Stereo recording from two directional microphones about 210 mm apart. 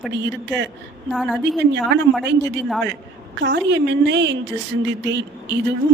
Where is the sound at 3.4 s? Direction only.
55° right (ahead or behind).